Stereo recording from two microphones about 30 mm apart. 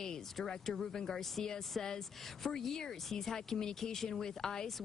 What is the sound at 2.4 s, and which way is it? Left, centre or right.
Speech, centre.